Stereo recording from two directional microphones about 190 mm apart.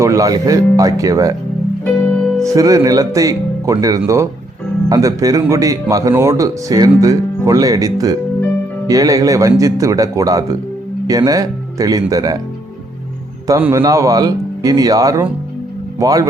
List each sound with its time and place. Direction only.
0.0 s speech: 15° right (ahead or behind)
1.8 s music: 5° left (ahead or behind)
2.4 s speech: 15° right (ahead or behind)
13.5 s speech: 15° right (ahead or behind)